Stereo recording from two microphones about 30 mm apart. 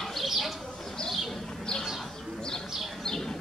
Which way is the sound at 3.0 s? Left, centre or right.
Left.